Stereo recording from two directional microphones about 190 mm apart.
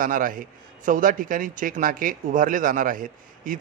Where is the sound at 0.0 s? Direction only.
45° right (ahead or behind).